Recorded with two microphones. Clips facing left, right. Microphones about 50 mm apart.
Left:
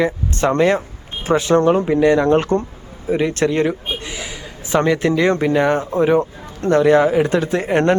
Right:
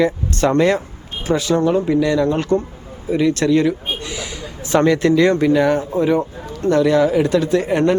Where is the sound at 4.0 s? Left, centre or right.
Centre.